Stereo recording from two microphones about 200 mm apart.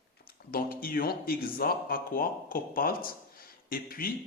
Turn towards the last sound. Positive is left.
turn(degrees=45)  # may be behind; listen again after turning